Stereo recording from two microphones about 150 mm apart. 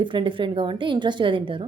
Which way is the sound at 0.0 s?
35° right (ahead or behind).